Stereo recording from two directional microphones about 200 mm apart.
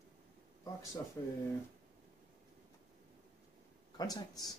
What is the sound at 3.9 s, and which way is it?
Speech, 20° left (ahead or behind).